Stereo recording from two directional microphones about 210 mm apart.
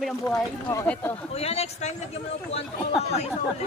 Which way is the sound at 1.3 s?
30° left (ahead or behind).